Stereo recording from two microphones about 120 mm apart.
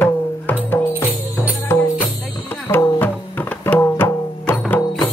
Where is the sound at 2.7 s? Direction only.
20° left (ahead or behind).